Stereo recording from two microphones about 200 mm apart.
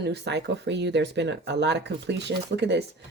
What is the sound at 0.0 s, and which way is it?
Speech, 55° right (ahead or behind).